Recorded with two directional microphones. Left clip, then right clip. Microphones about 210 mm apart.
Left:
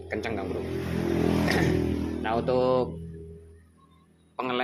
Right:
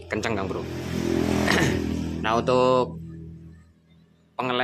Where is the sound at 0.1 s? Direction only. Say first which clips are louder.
Right 5 dB; 20° right (ahead or behind).